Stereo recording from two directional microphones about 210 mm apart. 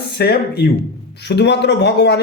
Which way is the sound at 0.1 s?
50° left (ahead or behind).